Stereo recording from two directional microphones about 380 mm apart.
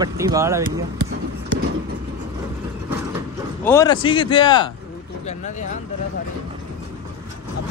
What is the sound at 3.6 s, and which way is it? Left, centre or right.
Speech, centre.